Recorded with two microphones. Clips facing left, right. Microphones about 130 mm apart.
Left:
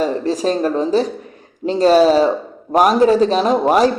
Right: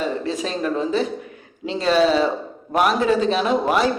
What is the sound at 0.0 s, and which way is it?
A man's voice, 35° left (ahead or behind).